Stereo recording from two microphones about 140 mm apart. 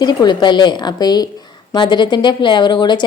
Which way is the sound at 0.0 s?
30° left (ahead or behind).